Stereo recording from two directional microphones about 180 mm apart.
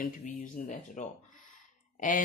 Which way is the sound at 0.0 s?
45° left (ahead or behind).